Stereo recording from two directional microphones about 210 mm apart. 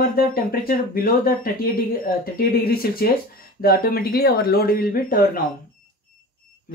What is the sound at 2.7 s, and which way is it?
Speech, 45° left (ahead or behind).